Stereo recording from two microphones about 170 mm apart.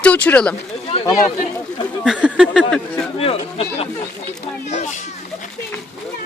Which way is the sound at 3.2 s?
35° left (ahead or behind).